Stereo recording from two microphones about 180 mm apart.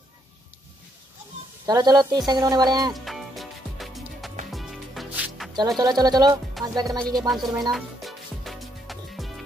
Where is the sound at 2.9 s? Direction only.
Centre (ahead or behind).